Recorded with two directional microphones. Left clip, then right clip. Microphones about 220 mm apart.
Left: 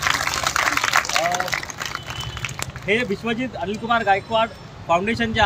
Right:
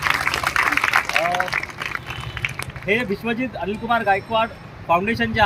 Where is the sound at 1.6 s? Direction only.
50° left (ahead or behind).